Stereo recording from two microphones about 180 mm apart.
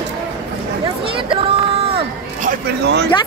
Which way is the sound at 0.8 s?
30° right (ahead or behind).